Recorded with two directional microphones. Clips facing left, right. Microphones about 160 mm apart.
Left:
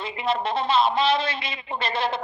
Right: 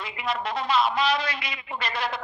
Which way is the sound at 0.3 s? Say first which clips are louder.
Left 3 dB; 25° left (ahead or behind).